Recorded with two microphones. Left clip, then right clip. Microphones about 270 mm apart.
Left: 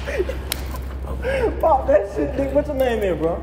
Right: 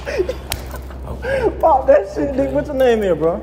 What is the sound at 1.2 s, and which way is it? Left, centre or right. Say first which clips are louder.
A man's voice: right 4 dB; right.